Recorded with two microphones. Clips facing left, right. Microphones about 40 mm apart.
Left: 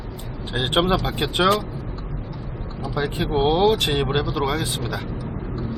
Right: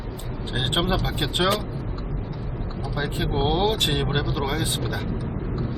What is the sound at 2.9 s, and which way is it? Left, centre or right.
Speech, centre.